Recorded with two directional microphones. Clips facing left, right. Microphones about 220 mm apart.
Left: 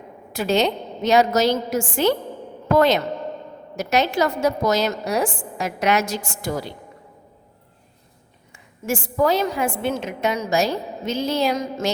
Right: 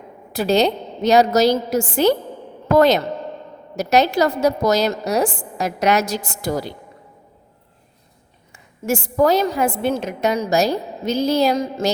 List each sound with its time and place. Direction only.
0.3 s a woman's voice: 35° right (ahead or behind)
8.9 s a woman's voice: 40° right (ahead or behind)